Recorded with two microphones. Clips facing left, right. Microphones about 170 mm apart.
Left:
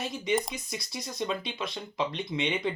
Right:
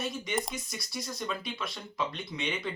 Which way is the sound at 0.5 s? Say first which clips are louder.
Left 1 dB; 20° left (ahead or behind).